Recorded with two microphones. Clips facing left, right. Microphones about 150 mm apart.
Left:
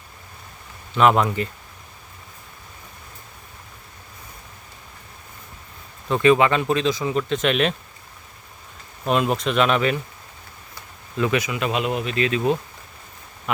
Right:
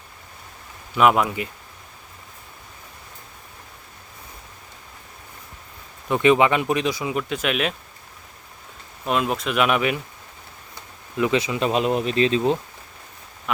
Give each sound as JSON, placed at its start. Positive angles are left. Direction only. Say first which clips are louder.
{"t": 0.9, "sound": "speech", "louder": "left 1 dB", "side_deg": -10}
{"t": 6.1, "sound": "speech", "louder": "even", "side_deg": -15}
{"t": 9.0, "sound": "speech", "louder": "left 2 dB", "side_deg": 0}
{"t": 11.2, "sound": "speech", "louder": "right 1 dB", "side_deg": -25}